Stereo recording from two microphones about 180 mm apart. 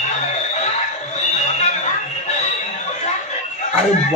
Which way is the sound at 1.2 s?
40° left (ahead or behind).